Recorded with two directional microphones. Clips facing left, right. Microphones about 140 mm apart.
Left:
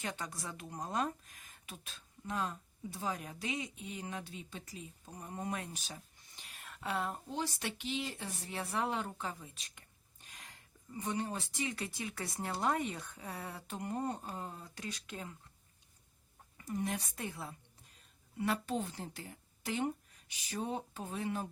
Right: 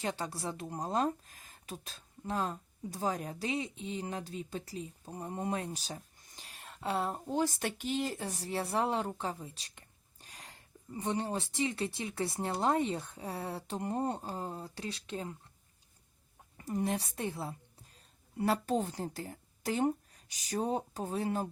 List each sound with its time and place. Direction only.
0.0 s a woman's voice: 30° right (ahead or behind)
16.6 s a woman's voice: 35° right (ahead or behind)